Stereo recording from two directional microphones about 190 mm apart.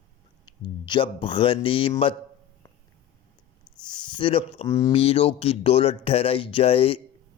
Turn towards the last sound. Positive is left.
turn(degrees=30)  # may be behind; listen again after turning